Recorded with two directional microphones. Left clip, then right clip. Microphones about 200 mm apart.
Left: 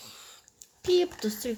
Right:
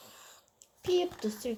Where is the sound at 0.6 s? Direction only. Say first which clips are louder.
Left 5 dB; 35° left (ahead or behind).